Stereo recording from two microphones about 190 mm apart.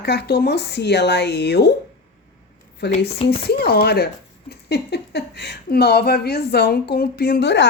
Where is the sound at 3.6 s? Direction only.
55° left (ahead or behind).